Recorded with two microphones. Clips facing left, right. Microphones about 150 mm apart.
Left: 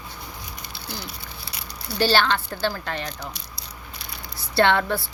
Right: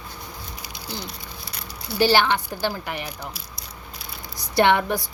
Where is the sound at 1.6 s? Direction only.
15° right (ahead or behind).